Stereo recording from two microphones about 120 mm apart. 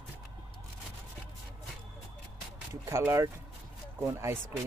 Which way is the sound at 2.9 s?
25° right (ahead or behind).